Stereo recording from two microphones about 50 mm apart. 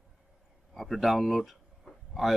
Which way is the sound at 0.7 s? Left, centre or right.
Centre.